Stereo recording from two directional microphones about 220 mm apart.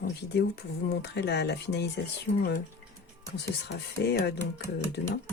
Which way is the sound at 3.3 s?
50° left (ahead or behind).